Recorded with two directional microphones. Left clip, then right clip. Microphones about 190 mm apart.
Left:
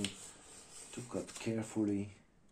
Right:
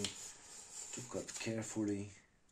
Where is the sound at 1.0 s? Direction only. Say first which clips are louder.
Left 2 dB; 25° right (ahead or behind).